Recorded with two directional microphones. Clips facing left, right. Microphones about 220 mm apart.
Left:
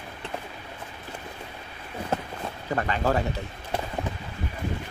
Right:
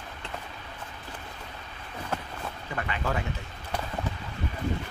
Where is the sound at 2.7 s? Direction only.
40° left (ahead or behind).